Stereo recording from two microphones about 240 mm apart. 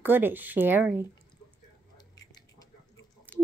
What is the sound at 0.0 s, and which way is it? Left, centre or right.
Speech, centre.